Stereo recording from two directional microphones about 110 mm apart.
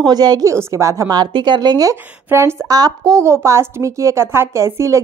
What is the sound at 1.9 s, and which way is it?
A woman's voice, 25° right (ahead or behind).